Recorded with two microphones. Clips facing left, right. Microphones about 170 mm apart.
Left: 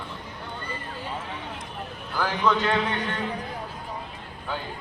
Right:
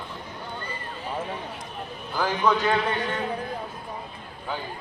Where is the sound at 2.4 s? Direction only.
10° right (ahead or behind).